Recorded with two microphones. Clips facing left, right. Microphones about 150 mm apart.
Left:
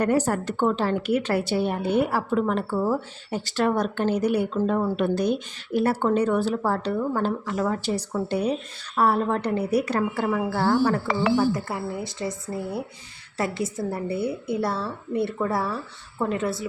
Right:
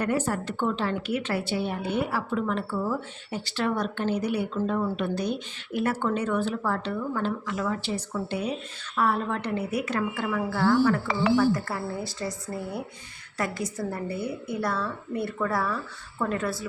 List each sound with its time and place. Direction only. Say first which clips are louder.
0.0 s a woman's voice: left 4 dB; 40° left (ahead or behind)
11.3 s a woman's voice: even; 20° left (ahead or behind)